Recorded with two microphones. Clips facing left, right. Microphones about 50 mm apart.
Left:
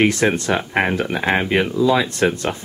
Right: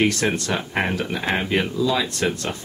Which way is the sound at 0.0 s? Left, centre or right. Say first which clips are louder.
Left 4 dB; centre.